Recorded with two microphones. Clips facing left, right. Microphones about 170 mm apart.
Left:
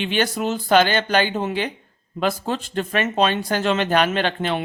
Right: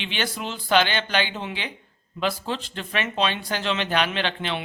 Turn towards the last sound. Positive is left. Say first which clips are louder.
# left 5 dB
turn(degrees=45)  # may be behind; listen again after turning